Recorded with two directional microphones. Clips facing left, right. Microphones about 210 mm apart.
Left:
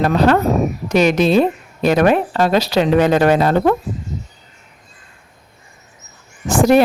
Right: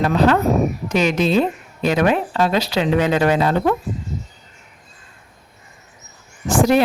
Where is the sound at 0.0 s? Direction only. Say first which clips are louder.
Left 2 dB; 45° left (ahead or behind).